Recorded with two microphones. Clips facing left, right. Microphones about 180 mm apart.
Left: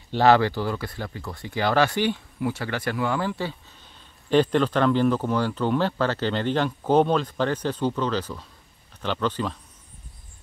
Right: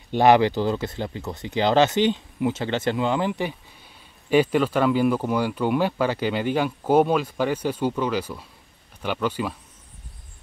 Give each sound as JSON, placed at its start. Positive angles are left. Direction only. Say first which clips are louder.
{"t": 0.1, "sound": "speech", "louder": "right 2 dB", "side_deg": -15}